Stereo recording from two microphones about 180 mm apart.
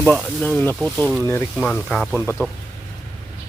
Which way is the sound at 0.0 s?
10° left (ahead or behind).